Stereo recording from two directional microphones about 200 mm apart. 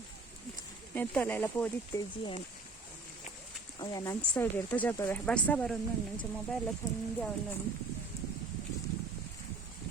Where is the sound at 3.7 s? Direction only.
20° left (ahead or behind).